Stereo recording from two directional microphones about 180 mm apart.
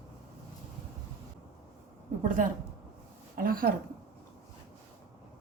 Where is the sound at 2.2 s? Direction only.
45° right (ahead or behind).